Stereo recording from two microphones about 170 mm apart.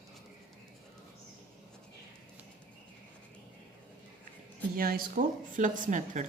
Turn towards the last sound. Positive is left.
turn(degrees=-45)  # may be behind; listen again after turning